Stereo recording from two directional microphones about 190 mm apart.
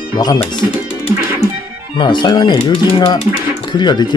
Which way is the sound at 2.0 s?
25° left (ahead or behind).